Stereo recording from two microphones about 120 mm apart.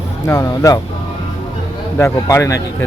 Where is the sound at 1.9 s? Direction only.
25° left (ahead or behind).